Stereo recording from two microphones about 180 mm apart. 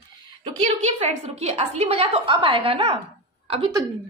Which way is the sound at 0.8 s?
40° right (ahead or behind).